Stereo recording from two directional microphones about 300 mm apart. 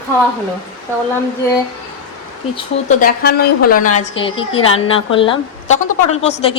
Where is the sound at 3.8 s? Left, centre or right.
Left.